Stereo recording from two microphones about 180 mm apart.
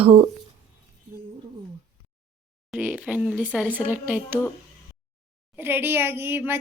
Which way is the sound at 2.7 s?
10° right (ahead or behind).